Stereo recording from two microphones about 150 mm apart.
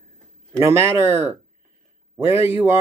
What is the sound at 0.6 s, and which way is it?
Speech, 15° right (ahead or behind).